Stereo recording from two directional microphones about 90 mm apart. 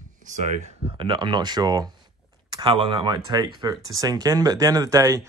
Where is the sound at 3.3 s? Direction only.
50° right (ahead or behind).